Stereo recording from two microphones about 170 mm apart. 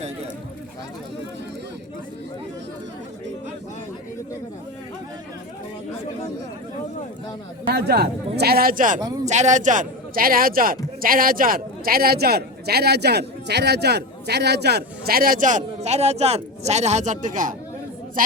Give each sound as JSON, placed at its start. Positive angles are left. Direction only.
{"t": 7.7, "sound": "a man's voice", "side_deg": -70}